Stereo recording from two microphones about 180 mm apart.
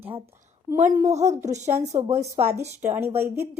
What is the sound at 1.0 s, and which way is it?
Speech, 40° right (ahead or behind).